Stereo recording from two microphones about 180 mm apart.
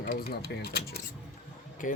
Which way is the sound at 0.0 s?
55° left (ahead or behind).